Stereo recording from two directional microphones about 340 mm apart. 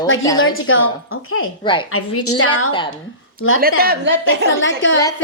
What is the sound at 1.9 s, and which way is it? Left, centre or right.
Speech, left.